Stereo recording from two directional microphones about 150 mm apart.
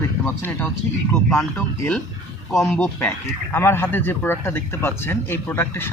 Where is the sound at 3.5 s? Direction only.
15° left (ahead or behind).